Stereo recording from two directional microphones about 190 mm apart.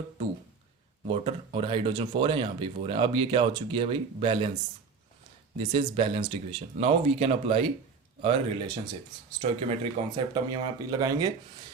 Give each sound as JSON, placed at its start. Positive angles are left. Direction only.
{"t": 1.0, "sound": "speech", "side_deg": -30}
{"t": 5.5, "sound": "speech", "side_deg": -30}